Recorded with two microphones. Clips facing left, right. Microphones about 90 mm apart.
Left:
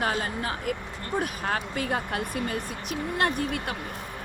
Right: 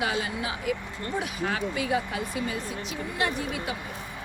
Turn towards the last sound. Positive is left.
turn(degrees=55)  # may be behind; listen again after turning